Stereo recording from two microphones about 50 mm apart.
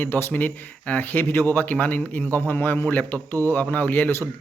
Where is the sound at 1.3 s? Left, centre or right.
Left.